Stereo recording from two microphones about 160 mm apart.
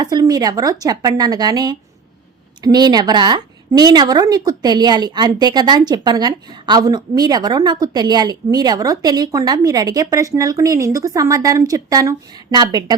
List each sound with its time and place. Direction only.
0.0 s a woman's voice: 25° right (ahead or behind)